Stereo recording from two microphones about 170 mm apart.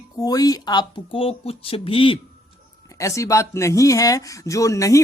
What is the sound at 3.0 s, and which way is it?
Speech, 20° left (ahead or behind).